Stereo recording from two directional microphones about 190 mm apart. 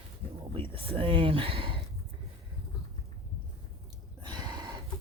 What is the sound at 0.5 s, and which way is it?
Speech, 30° right (ahead or behind).